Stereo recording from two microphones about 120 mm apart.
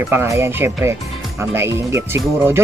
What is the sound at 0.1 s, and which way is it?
Speech, 20° right (ahead or behind).